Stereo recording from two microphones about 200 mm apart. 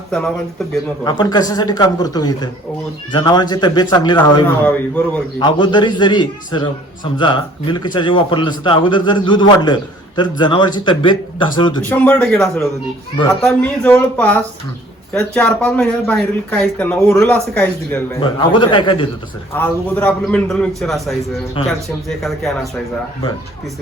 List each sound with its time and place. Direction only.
1.0 s a man's voice: 20° left (ahead or behind)
4.4 s speech: 10° left (ahead or behind)
5.4 s a man's voice: 20° left (ahead or behind)
11.9 s speech: 10° left (ahead or behind)
18.2 s a man's voice: 25° left (ahead or behind)
19.5 s a man's voice: 10° left (ahead or behind)